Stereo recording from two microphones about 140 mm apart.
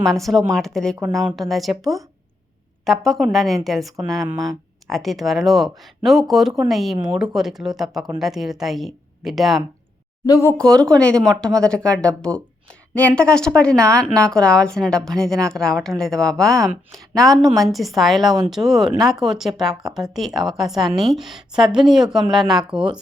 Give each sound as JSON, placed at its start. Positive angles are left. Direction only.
{"t": 0.0, "sound": "a woman's voice", "side_deg": 0}
{"t": 10.2, "sound": "speech", "side_deg": 25}
{"t": 10.6, "sound": "a woman's voice", "side_deg": 5}